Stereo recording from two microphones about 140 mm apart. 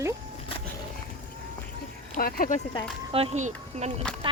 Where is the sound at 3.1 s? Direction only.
50° right (ahead or behind).